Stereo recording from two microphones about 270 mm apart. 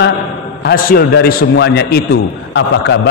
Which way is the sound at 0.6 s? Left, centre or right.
Left.